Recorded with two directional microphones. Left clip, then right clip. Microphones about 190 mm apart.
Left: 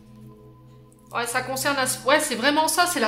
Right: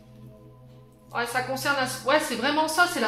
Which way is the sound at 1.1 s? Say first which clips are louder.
Left 1 dB; 35° left (ahead or behind).